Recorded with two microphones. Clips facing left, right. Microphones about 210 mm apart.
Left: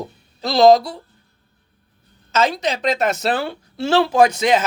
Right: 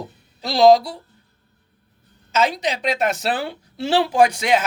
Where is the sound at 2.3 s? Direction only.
15° right (ahead or behind).